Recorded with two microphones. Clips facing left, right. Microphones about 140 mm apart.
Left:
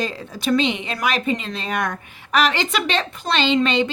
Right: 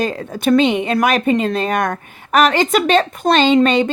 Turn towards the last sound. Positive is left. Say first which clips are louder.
# right 6 dB
turn(degrees=-45)  # may be behind; listen again after turning